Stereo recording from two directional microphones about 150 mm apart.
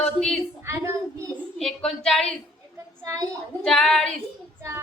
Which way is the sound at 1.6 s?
5° left (ahead or behind).